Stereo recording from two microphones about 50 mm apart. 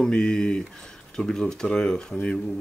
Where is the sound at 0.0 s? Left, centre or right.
Centre.